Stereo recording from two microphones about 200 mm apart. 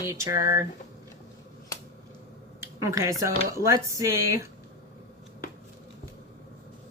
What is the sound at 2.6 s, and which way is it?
Speech, 15° right (ahead or behind).